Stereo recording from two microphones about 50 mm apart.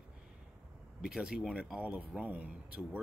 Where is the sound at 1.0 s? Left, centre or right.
Centre.